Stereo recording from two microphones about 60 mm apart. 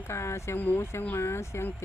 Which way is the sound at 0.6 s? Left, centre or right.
Left.